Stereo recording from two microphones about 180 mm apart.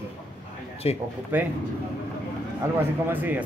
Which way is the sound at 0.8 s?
35° left (ahead or behind).